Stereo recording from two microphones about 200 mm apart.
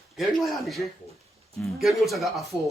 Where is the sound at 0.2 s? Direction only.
Centre (ahead or behind).